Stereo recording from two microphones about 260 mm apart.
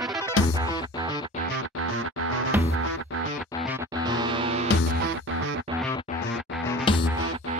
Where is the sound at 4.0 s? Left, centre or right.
Centre.